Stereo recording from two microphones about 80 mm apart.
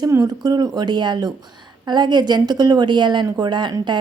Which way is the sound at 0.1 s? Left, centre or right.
Right.